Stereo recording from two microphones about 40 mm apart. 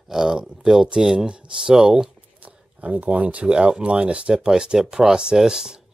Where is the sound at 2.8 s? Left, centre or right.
Right.